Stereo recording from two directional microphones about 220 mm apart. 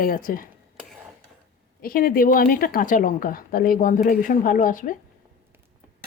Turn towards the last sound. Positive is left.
turn(degrees=40)  # may be behind; listen again after turning